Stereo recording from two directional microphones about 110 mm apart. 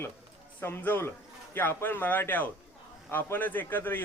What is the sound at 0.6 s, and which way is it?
A man's voice, 20° left (ahead or behind).